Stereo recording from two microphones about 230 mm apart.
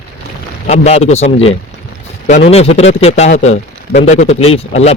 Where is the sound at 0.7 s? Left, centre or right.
Left.